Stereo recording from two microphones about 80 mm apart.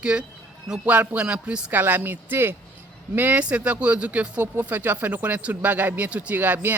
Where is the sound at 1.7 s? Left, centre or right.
Right.